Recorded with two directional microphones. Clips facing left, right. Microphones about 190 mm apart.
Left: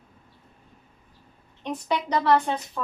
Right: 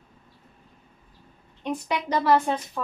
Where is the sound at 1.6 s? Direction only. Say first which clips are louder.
Even; 5° right (ahead or behind).